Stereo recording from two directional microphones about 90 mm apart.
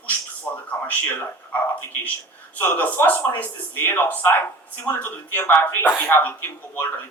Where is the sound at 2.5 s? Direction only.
20° left (ahead or behind).